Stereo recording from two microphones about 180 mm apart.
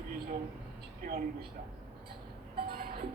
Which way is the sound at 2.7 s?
55° right (ahead or behind).